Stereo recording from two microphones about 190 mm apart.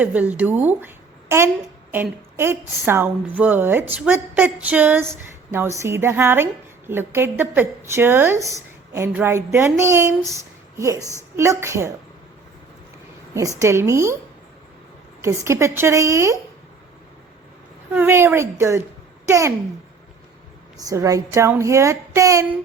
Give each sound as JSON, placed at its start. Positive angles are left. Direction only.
{"t": 0.0, "sound": "a woman's voice", "side_deg": -10}
{"t": 13.6, "sound": "speech", "side_deg": -15}
{"t": 15.2, "sound": "speech", "side_deg": -15}
{"t": 17.9, "sound": "speech", "side_deg": -10}
{"t": 20.7, "sound": "speech", "side_deg": -15}